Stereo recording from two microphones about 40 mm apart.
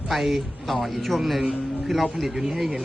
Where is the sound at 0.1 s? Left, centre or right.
Centre.